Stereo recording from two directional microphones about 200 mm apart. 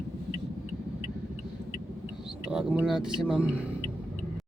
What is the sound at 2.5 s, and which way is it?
Speech, 5° right (ahead or behind).